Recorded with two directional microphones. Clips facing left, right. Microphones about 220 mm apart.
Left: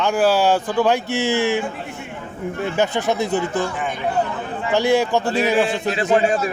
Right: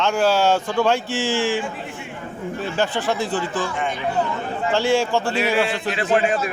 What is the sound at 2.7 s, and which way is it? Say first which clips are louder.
Speech: left 2 dB; 20° left (ahead or behind).